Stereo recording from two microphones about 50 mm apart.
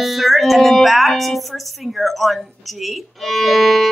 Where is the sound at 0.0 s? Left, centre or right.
Centre.